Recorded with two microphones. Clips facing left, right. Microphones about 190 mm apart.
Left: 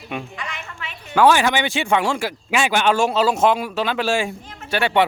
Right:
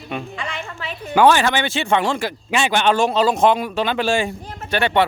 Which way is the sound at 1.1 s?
5° left (ahead or behind).